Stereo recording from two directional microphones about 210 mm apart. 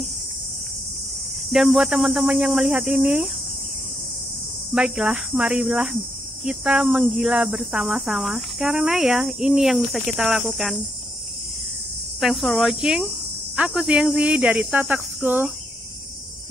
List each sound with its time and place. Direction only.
1.5 s speech: centre (ahead or behind)
4.7 s speech: 5° right (ahead or behind)
12.2 s speech: centre (ahead or behind)